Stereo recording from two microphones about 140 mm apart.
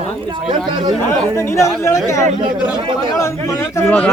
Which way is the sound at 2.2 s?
65° right (ahead or behind).